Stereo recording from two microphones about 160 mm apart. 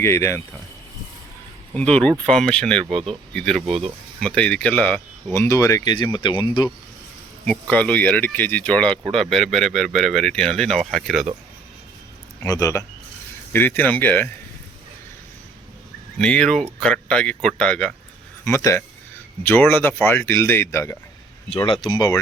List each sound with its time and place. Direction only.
0.0 s speech: 15° left (ahead or behind)
1.7 s speech: 5° left (ahead or behind); by 6.7 s 30° left (ahead or behind)
7.4 s speech: 10° left (ahead or behind)
12.4 s speech: 20° left (ahead or behind)
16.1 s speech: 5° left (ahead or behind)
18.4 s speech: 20° left (ahead or behind)